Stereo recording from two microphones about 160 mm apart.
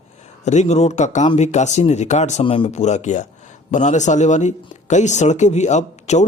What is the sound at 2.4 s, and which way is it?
Speech, 30° left (ahead or behind).